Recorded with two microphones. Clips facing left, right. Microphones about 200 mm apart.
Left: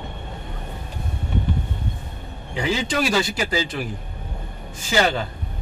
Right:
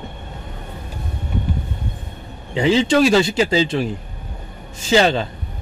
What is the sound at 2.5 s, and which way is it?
Speech, 25° right (ahead or behind).